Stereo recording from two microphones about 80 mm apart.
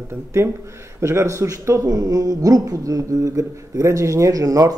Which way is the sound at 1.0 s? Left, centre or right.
Right.